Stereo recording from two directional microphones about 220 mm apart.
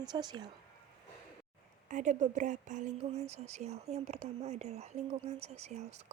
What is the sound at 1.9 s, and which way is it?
Speech, 35° right (ahead or behind).